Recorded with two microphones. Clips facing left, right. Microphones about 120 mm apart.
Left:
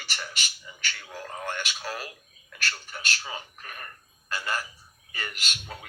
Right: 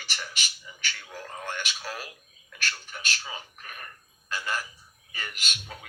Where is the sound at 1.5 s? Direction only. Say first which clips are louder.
Left 1 dB; 40° left (ahead or behind).